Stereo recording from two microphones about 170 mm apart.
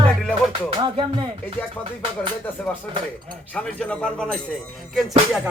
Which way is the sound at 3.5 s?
5° left (ahead or behind).